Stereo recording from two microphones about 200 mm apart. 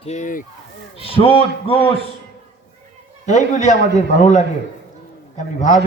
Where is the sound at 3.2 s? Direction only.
35° left (ahead or behind).